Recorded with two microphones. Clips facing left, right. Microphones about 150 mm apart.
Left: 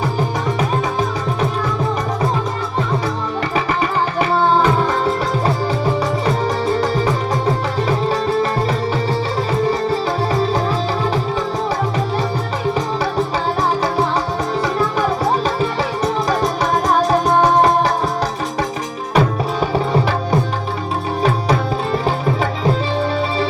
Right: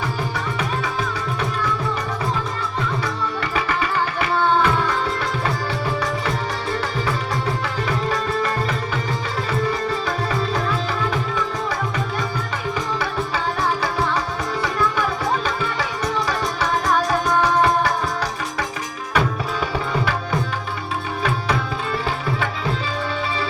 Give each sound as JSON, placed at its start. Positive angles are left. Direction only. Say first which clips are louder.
{"t": 4.2, "sound": "music", "louder": "left 4 dB", "side_deg": 35}
{"t": 7.9, "sound": "music", "louder": "left 5 dB", "side_deg": 30}
{"t": 11.0, "sound": "music", "louder": "left 4 dB", "side_deg": 35}
{"t": 13.0, "sound": "music", "louder": "left 5 dB", "side_deg": 35}
{"t": 19.1, "sound": "tabla", "louder": "left 5 dB", "side_deg": 35}
{"t": 22.0, "sound": "music", "louder": "left 6 dB", "side_deg": 40}